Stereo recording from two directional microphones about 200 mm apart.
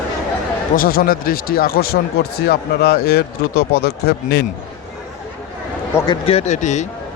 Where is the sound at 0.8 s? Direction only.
50° left (ahead or behind).